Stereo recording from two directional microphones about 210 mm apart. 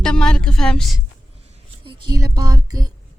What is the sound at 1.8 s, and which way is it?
Speech, 25° right (ahead or behind).